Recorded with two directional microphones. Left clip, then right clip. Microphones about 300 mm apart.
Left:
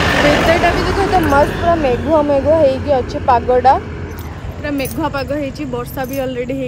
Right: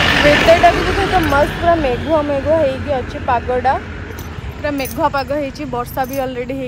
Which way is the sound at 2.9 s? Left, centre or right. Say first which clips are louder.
Left 4 dB; centre.